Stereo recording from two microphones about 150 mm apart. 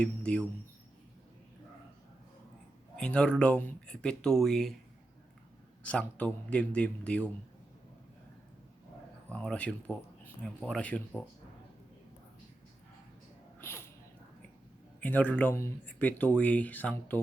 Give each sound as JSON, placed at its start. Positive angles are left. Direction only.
{"t": 0.0, "sound": "speech", "side_deg": 10}
{"t": 2.9, "sound": "speech", "side_deg": 5}
{"t": 5.8, "sound": "speech", "side_deg": 10}
{"t": 9.3, "sound": "speech", "side_deg": 5}
{"t": 13.6, "sound": "a sound", "side_deg": 15}
{"t": 15.0, "sound": "speech", "side_deg": 10}